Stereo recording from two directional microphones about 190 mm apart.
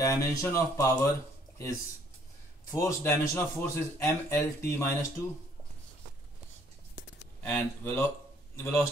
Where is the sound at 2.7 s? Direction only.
15° left (ahead or behind).